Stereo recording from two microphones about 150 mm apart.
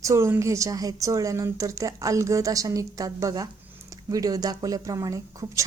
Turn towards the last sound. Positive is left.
turn(degrees=-20)  # may be behind; listen again after turning